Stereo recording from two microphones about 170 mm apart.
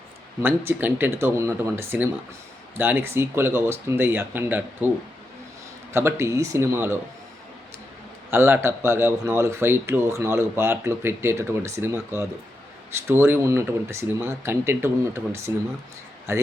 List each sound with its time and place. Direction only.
0.4 s speech: 15° right (ahead or behind)
5.9 s speech: 15° right (ahead or behind)
8.3 s speech: 15° right (ahead or behind)